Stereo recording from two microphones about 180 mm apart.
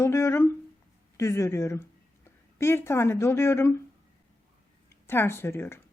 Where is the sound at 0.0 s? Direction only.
15° left (ahead or behind).